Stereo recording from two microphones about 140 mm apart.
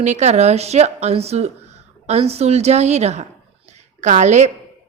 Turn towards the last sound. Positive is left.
turn(degrees=-55)  # may be behind; listen again after turning